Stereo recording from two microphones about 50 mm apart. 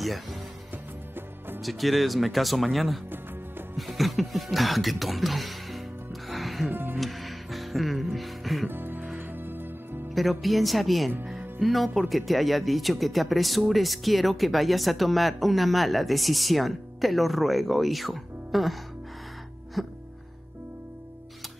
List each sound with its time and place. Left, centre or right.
0.0 s speech: centre
1.6 s speech: centre
6.7 s music: right
7.0 s music: centre
8.6 s music: right
10.1 s speech: centre